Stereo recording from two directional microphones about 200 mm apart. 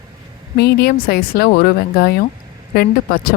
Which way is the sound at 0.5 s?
55° left (ahead or behind).